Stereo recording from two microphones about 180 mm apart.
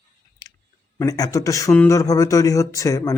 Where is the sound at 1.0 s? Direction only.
20° left (ahead or behind).